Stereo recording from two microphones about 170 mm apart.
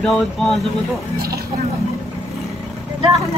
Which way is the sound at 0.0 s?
Centre (ahead or behind).